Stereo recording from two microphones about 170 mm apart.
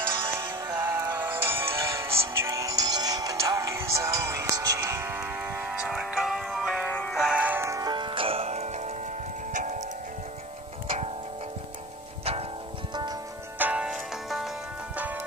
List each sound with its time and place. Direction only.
0.1 s music: 15° right (ahead or behind); by 9.8 s 45° right (ahead or behind)
12.9 s music: 25° right (ahead or behind)
13.6 s music: 5° right (ahead or behind)